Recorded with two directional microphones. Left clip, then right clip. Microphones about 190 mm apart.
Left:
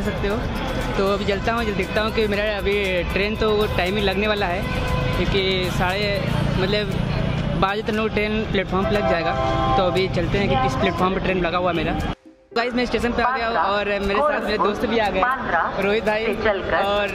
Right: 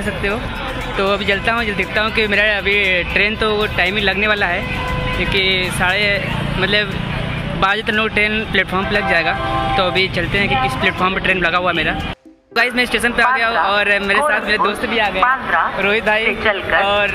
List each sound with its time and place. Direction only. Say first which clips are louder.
0.9 s speech: right 6 dB; centre (ahead or behind)
7.6 s speech: right 6 dB; 5° left (ahead or behind)
15.0 s speech: right 6 dB; 15° left (ahead or behind)
15.8 s speech: right 5 dB; centre (ahead or behind)